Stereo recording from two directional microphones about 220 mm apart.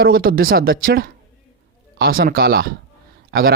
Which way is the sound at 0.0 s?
45° right (ahead or behind).